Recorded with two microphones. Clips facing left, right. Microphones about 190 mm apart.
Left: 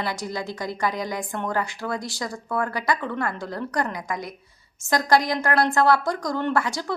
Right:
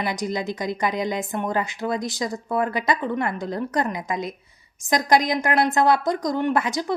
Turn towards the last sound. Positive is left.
turn(degrees=-20)  # may be behind; listen again after turning